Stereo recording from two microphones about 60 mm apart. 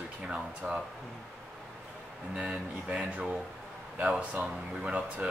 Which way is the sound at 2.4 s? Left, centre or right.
Centre.